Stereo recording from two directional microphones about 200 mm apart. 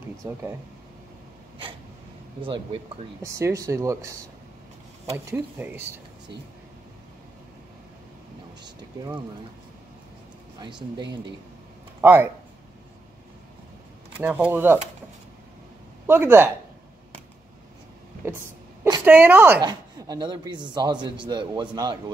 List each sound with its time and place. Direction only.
0.2 s speech: 15° right (ahead or behind)
2.4 s speech: 25° right (ahead or behind)
8.6 s speech: 20° right (ahead or behind)
12.0 s speech: 10° right (ahead or behind)
14.2 s speech: 10° right (ahead or behind)
16.1 s speech: 10° right (ahead or behind)
19.0 s a man's voice: 10° right (ahead or behind)